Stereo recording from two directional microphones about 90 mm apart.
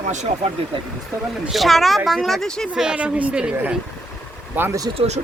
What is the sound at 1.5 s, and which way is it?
Speech, centre (ahead or behind).